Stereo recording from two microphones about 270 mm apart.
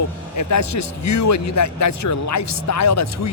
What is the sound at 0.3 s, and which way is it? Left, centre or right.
A man's voice, left.